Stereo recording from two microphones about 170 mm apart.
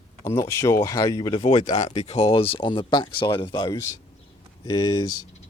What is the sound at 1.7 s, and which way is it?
Speech, 40° left (ahead or behind).